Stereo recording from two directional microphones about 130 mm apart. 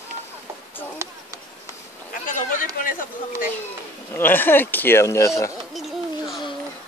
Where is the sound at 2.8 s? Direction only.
90° left.